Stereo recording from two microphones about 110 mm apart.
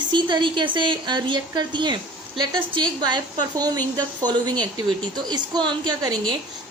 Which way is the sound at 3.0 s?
40° right (ahead or behind).